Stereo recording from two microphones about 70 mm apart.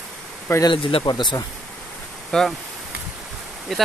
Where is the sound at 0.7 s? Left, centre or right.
Left.